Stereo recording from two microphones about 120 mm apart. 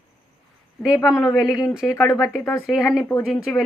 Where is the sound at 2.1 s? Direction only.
25° left (ahead or behind).